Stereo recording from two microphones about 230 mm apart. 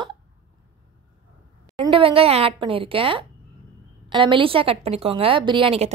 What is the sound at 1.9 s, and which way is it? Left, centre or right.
A woman's voice, right.